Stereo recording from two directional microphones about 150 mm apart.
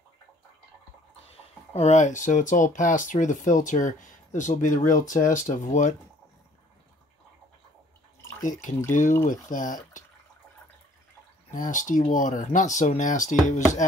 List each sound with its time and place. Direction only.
1.7 s speech: 45° left (ahead or behind)
8.4 s speech: 60° left (ahead or behind)
11.5 s speech: 60° left (ahead or behind)